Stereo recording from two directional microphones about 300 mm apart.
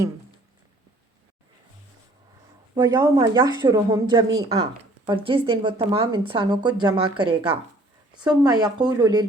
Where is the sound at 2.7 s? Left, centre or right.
Centre.